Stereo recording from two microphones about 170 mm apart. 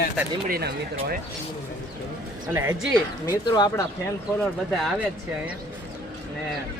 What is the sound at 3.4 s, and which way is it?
Speech, 25° left (ahead or behind).